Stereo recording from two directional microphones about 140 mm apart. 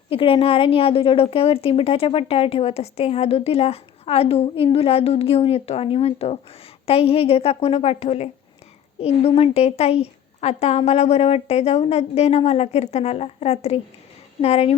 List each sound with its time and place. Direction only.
0.1 s a woman's voice: 40° left (ahead or behind)